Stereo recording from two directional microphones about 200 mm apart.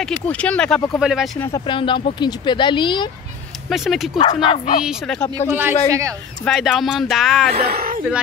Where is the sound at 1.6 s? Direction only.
25° left (ahead or behind).